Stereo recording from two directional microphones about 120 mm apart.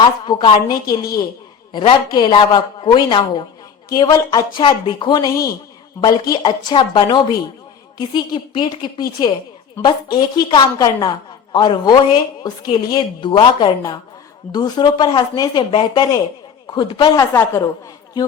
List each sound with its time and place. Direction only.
0.0 s a woman's voice: 45° left (ahead or behind)